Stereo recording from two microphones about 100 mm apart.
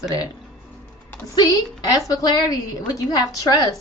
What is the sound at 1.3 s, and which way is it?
A woman's voice, 40° left (ahead or behind).